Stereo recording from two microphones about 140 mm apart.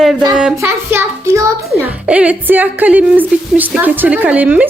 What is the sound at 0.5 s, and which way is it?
A woman's voice, 15° right (ahead or behind).